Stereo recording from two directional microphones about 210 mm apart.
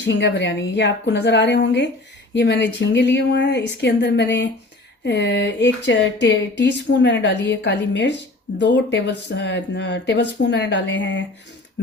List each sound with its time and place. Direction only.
0.0 s speech: 55° left (ahead or behind)